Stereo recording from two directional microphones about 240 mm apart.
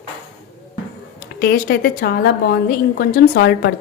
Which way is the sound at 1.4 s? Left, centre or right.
Left.